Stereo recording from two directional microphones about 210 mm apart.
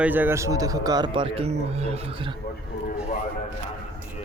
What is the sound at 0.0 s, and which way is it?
Speech, 10° right (ahead or behind).